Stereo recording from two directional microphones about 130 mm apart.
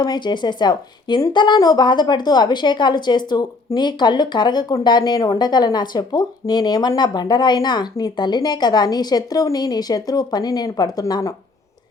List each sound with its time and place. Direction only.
0.0 s speech: 35° left (ahead or behind)